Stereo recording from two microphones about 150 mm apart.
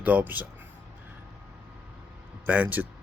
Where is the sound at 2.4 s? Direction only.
10° right (ahead or behind).